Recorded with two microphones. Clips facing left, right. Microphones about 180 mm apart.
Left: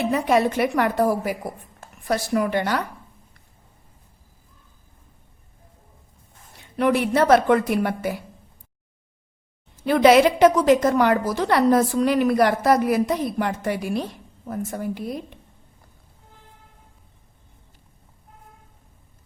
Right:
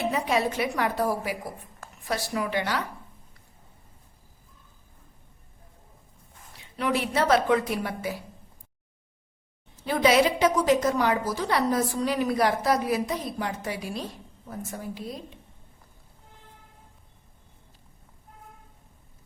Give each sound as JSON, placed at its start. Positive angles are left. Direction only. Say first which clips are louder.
{"t": 0.1, "sound": "a woman's voice", "louder": "left 6 dB", "side_deg": 55}
{"t": 6.6, "sound": "a woman's voice", "louder": "left 7 dB", "side_deg": 55}
{"t": 9.8, "sound": "a woman's voice", "louder": "left 6 dB", "side_deg": 65}